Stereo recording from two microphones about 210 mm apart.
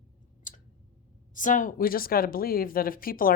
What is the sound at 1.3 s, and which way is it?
Speech, 40° left (ahead or behind).